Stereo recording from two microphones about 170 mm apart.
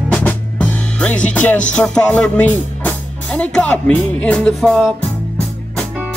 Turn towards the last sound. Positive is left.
turn(degrees=5)  # may be behind; listen again after turning